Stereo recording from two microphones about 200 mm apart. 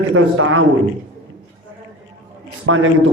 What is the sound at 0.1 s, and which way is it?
Speech, 90° right.